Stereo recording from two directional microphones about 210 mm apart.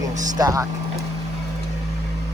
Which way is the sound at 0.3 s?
15° right (ahead or behind).